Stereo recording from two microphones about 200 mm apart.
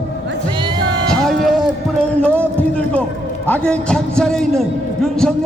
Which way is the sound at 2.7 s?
5° left (ahead or behind).